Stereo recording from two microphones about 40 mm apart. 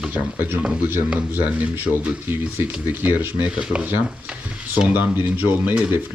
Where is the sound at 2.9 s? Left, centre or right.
Right.